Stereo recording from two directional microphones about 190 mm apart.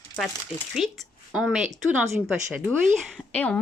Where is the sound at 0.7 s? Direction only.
5° right (ahead or behind).